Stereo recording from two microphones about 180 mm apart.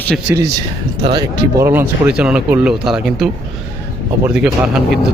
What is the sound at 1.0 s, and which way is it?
Speech, 25° right (ahead or behind).